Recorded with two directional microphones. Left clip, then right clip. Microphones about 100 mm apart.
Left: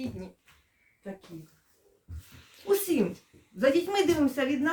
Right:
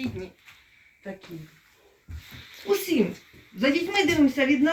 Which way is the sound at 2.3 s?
55° left (ahead or behind).